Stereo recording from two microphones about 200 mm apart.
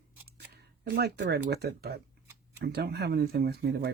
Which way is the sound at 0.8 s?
55° right (ahead or behind).